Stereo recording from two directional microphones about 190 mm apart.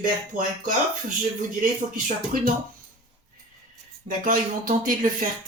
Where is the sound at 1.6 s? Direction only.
45° right (ahead or behind).